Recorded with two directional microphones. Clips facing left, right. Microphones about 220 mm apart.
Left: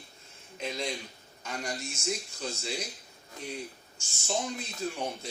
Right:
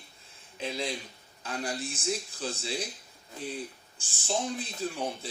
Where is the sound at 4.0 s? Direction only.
35° right (ahead or behind).